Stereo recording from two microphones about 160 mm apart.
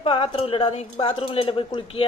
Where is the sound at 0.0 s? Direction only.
35° left (ahead or behind).